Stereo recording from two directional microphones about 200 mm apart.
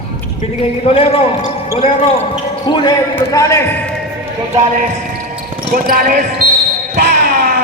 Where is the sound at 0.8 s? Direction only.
30° left (ahead or behind); by 3.7 s 15° left (ahead or behind).